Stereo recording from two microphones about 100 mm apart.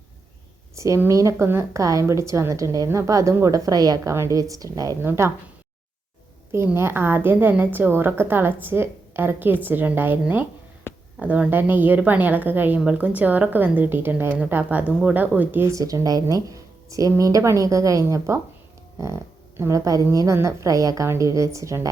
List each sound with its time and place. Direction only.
0.8 s a woman's voice: 30° right (ahead or behind)
6.5 s a woman's voice: 25° right (ahead or behind)
15.7 s a woman's voice: 35° right (ahead or behind)